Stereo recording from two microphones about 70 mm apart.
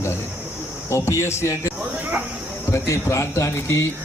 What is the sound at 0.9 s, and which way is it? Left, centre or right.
Speech, left.